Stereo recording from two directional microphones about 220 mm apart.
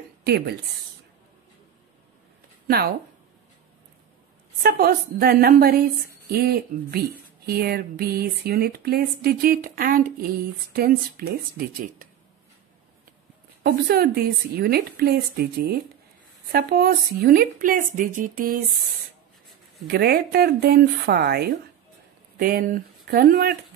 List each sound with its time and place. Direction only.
0.2 s speech: 45° right (ahead or behind)
4.6 s speech: 45° right (ahead or behind)
13.6 s speech: 45° right (ahead or behind)
19.9 s speech: 45° right (ahead or behind)